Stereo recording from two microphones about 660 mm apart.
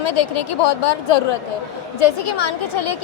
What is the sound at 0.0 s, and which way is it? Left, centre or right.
Speech, left.